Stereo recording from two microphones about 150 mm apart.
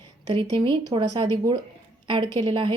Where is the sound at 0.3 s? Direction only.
35° right (ahead or behind).